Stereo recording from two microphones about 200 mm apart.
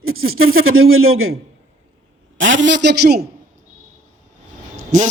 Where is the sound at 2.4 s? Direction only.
70° right (ahead or behind); by 3.2 s 55° right (ahead or behind).